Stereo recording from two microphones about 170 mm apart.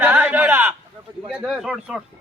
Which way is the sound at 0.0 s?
10° right (ahead or behind).